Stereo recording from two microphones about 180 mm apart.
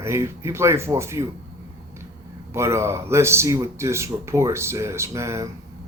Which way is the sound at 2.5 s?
15° right (ahead or behind).